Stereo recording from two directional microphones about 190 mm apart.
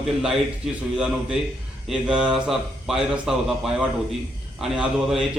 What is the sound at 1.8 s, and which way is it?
A man's voice, 5° right (ahead or behind).